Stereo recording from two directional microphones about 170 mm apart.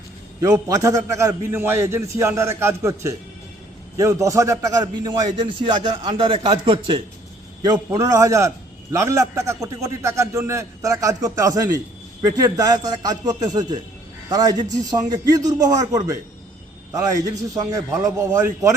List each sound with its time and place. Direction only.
0.3 s a man's voice: 20° right (ahead or behind)